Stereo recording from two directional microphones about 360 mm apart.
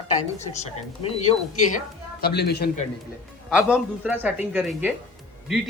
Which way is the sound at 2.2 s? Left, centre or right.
Left.